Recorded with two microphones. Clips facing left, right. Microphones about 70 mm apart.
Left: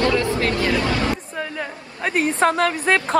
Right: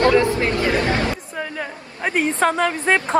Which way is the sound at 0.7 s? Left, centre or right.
Right.